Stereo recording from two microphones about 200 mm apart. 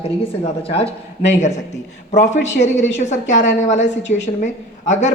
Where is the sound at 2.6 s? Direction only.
35° left (ahead or behind).